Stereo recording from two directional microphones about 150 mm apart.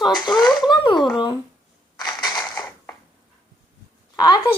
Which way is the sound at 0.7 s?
30° left (ahead or behind).